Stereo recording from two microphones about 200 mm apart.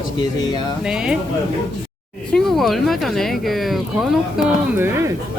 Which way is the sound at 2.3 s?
Centre (ahead or behind).